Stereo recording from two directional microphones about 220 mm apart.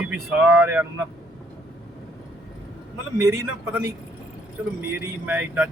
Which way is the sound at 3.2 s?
15° right (ahead or behind).